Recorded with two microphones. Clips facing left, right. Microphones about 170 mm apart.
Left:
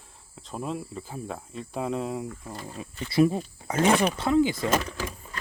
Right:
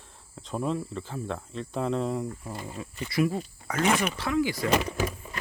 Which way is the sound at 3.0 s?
30° left (ahead or behind).